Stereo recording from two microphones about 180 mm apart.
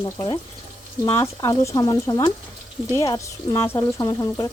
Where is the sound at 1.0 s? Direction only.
15° left (ahead or behind).